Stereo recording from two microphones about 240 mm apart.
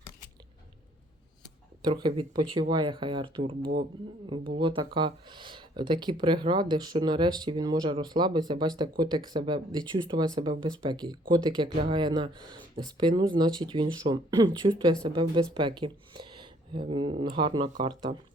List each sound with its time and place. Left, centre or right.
1.8 s speech: centre